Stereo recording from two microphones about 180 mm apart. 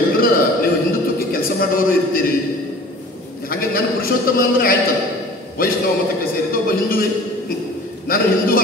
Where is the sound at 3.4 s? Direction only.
55° left (ahead or behind).